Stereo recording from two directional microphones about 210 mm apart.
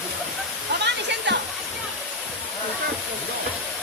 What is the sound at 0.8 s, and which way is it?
Waterfall, 55° right (ahead or behind).